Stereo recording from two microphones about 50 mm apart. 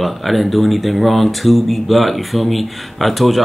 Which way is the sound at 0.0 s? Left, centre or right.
Centre.